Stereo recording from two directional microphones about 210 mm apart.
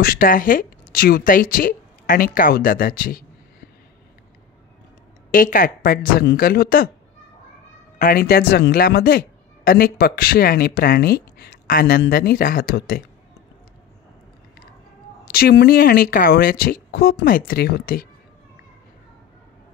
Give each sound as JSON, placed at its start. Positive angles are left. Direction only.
{"t": 0.0, "sound": "speech", "side_deg": 45}
{"t": 5.3, "sound": "speech", "side_deg": 40}
{"t": 8.0, "sound": "speech", "side_deg": 45}
{"t": 15.2, "sound": "speech", "side_deg": 45}